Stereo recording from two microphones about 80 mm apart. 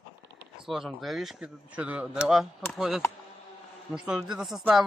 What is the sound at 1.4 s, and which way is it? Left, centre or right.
A man's voice, centre.